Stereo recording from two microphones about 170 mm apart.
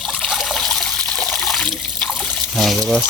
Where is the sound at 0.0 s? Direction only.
Centre (ahead or behind).